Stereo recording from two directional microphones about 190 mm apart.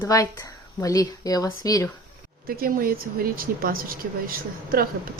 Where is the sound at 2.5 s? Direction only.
50° right (ahead or behind).